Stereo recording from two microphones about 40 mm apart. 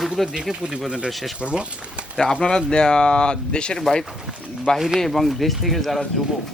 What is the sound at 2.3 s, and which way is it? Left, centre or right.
Speech, left.